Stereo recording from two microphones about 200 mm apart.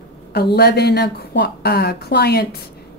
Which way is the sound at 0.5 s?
55° left (ahead or behind).